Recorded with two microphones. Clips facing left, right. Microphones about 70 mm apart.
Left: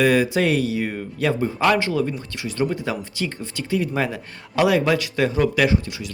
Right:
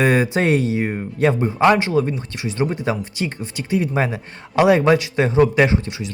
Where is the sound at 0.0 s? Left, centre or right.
Right.